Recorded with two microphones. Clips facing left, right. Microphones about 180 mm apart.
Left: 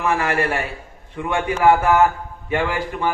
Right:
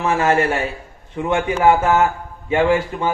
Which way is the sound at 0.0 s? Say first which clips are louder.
Right 3 dB; 25° right (ahead or behind).